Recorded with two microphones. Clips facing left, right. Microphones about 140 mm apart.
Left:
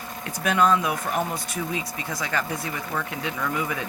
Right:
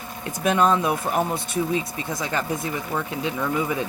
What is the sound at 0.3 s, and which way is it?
Speech, 25° right (ahead or behind).